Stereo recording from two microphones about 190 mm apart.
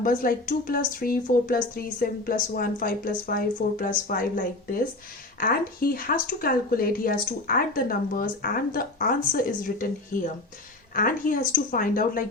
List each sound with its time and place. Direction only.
0.0 s speech: 45° left (ahead or behind)